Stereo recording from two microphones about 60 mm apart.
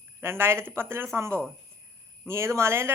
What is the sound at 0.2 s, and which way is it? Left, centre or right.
Speech, right.